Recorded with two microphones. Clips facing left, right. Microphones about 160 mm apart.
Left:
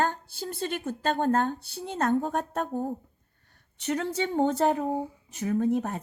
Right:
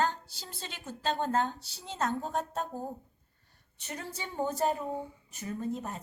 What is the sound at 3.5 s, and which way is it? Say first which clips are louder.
A woman's voice: left 13 dB; 75° left (ahead or behind).